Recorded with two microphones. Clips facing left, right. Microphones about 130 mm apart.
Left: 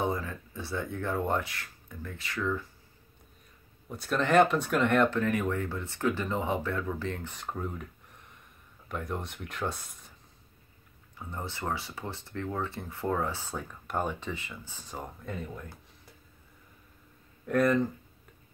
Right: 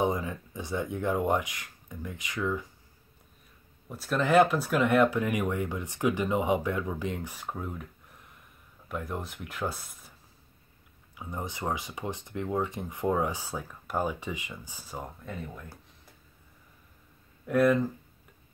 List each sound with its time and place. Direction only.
0.0 s speech: 15° right (ahead or behind)
3.9 s speech: centre (ahead or behind)
11.1 s speech: 15° right (ahead or behind)
17.5 s speech: 5° right (ahead or behind)